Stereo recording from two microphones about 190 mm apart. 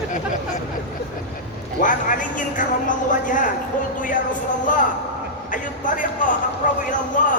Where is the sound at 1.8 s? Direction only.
45° left (ahead or behind).